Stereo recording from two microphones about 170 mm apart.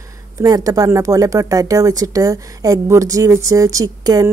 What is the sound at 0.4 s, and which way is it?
Speech, 20° right (ahead or behind).